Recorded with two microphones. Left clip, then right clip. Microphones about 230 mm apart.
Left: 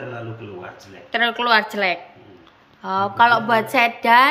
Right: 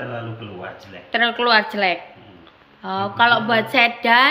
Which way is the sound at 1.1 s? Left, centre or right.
Centre.